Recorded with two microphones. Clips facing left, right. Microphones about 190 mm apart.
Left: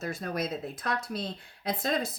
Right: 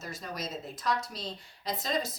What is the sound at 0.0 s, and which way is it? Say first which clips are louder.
Speech: left 6 dB; 55° left (ahead or behind).